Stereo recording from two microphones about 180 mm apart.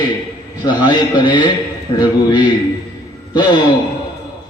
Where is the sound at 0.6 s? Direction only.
25° left (ahead or behind).